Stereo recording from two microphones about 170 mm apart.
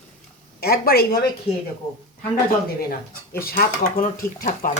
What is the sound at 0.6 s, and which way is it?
Speech, 65° left (ahead or behind).